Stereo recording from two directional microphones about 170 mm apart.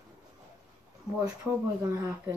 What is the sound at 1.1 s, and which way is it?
Speech, 15° right (ahead or behind).